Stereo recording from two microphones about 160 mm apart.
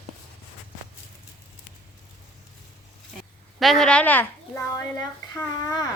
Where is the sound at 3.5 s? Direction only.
Centre (ahead or behind); by 5.8 s 25° left (ahead or behind).